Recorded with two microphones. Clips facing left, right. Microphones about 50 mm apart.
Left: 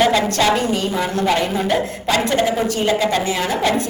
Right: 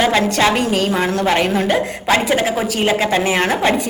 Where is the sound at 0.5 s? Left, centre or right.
Right.